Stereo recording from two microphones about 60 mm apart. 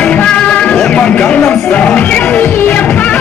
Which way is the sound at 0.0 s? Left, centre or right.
Centre.